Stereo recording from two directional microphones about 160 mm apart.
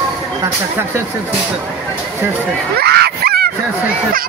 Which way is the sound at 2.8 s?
90° right.